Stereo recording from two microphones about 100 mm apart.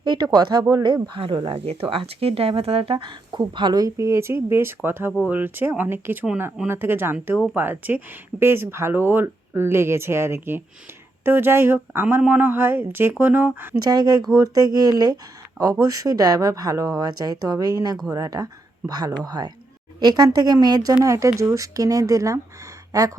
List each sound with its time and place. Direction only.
0.0 s speech: 45° right (ahead or behind)
1.2 s speech: 65° right (ahead or behind); by 13.7 s 15° right (ahead or behind)
13.7 s speech: 40° right (ahead or behind)